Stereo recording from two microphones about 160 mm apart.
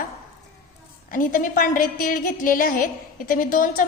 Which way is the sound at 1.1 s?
55° left (ahead or behind).